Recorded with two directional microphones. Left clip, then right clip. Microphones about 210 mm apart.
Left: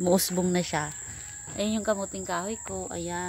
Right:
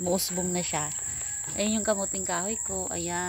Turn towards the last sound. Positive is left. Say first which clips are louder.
# right 1 dB
turn(degrees=-5)  # may be behind; listen again after turning